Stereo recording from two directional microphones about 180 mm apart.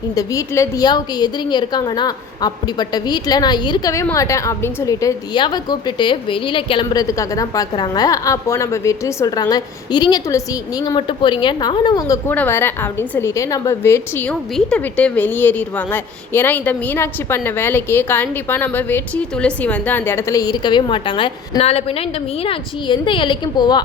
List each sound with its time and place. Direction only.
0.1 s a woman's voice: 20° left (ahead or behind)